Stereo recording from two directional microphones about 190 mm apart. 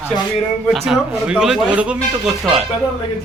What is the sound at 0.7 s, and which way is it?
Speech, 5° right (ahead or behind).